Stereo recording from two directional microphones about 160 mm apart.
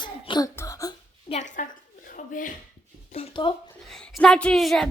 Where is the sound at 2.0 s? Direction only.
55° left (ahead or behind).